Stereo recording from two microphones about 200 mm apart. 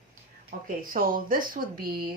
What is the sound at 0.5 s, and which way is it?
Speech, 50° right (ahead or behind).